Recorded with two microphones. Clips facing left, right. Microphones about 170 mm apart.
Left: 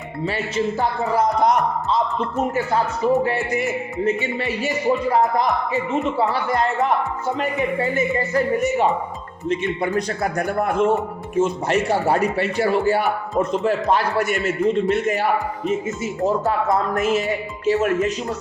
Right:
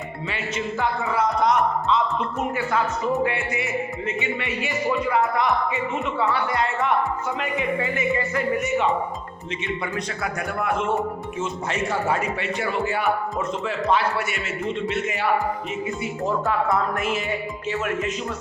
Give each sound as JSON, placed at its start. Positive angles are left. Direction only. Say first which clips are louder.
{"t": 0.3, "sound": "music", "louder": "left 6 dB", "side_deg": 35}
{"t": 3.2, "sound": "music", "louder": "left 4 dB", "side_deg": 40}
{"t": 11.3, "sound": "speech", "louder": "left 11 dB", "side_deg": 60}
{"t": 11.8, "sound": "music", "louder": "left 4 dB", "side_deg": 35}